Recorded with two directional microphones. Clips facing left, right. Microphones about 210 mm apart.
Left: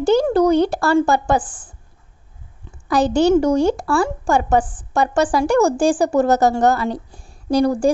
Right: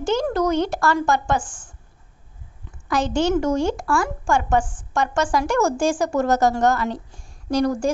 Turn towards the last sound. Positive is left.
turn(degrees=35)  # may be behind; listen again after turning